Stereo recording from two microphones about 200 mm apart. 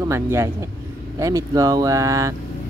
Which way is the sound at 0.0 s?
15° right (ahead or behind).